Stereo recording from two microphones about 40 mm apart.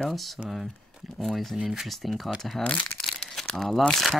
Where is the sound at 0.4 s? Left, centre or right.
Centre.